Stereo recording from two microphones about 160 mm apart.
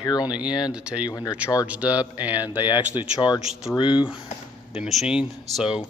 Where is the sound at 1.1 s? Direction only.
20° left (ahead or behind).